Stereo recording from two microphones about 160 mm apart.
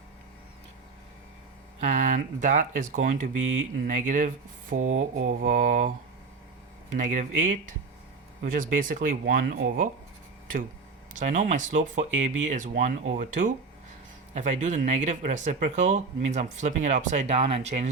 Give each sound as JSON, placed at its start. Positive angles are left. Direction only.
{"t": 1.8, "sound": "speech", "side_deg": -50}
{"t": 6.9, "sound": "speech", "side_deg": -50}
{"t": 8.5, "sound": "speech", "side_deg": -55}
{"t": 11.1, "sound": "speech", "side_deg": -50}